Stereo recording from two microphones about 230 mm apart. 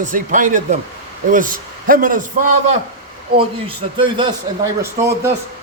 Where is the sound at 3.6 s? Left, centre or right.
Right.